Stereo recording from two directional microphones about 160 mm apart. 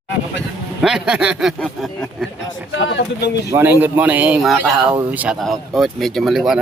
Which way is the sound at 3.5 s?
15° right (ahead or behind).